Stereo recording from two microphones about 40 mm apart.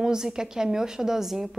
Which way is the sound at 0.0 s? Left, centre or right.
Centre.